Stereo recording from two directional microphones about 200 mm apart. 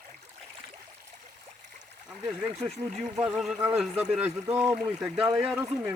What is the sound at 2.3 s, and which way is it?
Speech, 30° right (ahead or behind).